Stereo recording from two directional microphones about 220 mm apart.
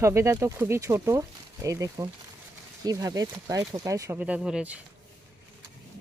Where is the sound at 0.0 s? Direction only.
15° right (ahead or behind).